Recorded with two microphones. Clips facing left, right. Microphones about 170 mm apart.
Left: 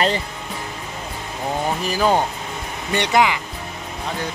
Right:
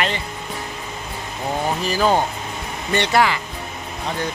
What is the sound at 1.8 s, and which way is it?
Speech, 15° left (ahead or behind).